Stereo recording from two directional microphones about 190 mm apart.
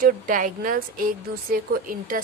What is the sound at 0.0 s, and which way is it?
A woman's voice, 45° right (ahead or behind).